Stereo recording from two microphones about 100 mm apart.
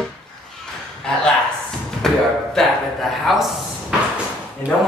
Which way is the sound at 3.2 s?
Centre (ahead or behind).